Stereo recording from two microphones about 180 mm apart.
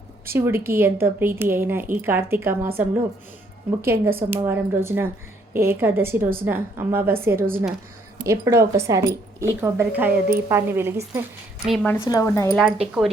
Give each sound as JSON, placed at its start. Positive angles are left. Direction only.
{"t": 0.3, "sound": "speech", "side_deg": -10}
{"t": 11.6, "sound": "speech", "side_deg": 0}
{"t": 11.9, "sound": "speech", "side_deg": 15}
{"t": 12.5, "sound": "speech", "side_deg": 0}